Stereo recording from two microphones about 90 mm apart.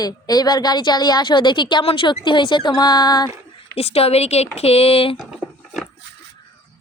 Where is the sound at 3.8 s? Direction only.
90° left.